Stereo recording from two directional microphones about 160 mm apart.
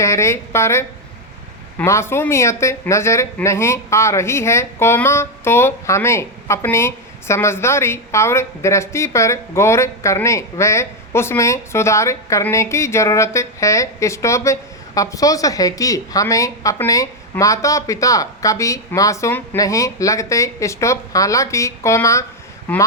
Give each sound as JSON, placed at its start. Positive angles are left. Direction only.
{"t": 0.0, "sound": "speech", "side_deg": 20}